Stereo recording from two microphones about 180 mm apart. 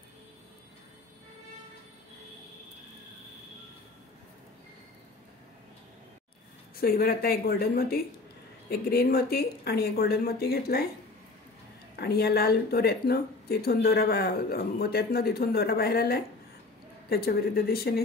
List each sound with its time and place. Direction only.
6.8 s speech: 55° left (ahead or behind)
12.0 s speech: 60° left (ahead or behind)